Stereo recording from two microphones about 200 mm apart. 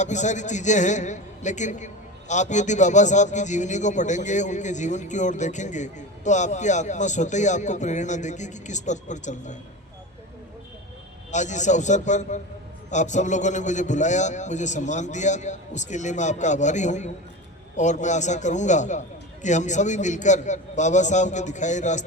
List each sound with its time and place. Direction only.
0.0 s a man's voice: 35° left (ahead or behind)
11.3 s a man's voice: 35° left (ahead or behind)